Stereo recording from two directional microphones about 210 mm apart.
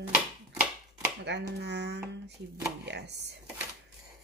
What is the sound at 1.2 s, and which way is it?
Speech, 55° right (ahead or behind).